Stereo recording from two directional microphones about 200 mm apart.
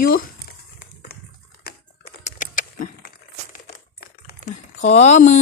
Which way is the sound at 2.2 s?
40° left (ahead or behind).